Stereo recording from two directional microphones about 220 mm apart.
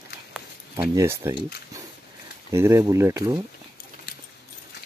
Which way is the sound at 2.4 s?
15° right (ahead or behind).